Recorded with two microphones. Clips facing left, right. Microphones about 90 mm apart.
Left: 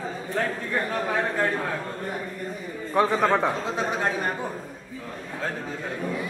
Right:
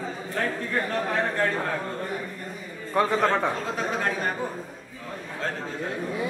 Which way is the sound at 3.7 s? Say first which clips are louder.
Left 1 dB; 20° left (ahead or behind).